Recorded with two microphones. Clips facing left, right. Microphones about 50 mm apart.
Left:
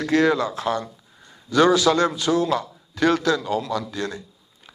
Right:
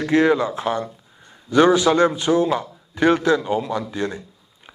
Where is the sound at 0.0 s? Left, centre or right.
Right.